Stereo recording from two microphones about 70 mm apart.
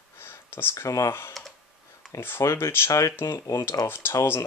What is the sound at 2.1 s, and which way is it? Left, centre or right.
Speech, left.